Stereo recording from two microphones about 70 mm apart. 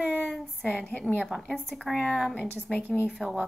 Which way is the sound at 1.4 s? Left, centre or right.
Centre.